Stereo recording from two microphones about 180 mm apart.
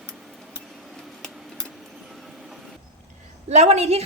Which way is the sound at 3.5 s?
35° right (ahead or behind).